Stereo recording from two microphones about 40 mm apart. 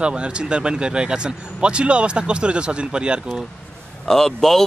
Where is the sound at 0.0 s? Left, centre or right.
Right.